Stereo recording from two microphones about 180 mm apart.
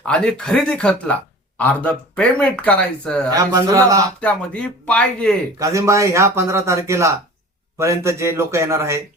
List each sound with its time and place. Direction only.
0.0 s speech: 5° left (ahead or behind)
3.3 s speech: 20° right (ahead or behind)
4.2 s speech: 5° left (ahead or behind)
5.5 s speech: 15° right (ahead or behind)